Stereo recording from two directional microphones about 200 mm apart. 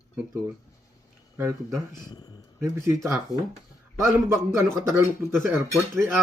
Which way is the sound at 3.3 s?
20° left (ahead or behind).